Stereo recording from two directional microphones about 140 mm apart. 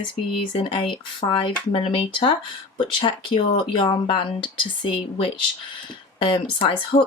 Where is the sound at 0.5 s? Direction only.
40° left (ahead or behind).